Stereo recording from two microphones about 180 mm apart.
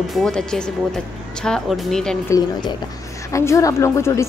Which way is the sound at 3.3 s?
15° left (ahead or behind).